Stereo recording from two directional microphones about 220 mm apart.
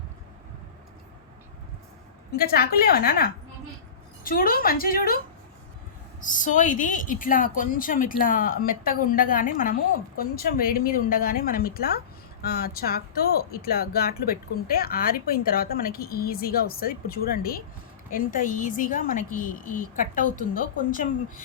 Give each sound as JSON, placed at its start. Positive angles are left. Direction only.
{"t": 2.3, "sound": "a woman's voice", "side_deg": 45}
{"t": 6.2, "sound": "a woman's voice", "side_deg": 35}